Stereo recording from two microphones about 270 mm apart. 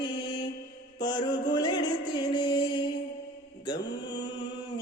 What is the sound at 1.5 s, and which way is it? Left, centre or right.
Music, centre.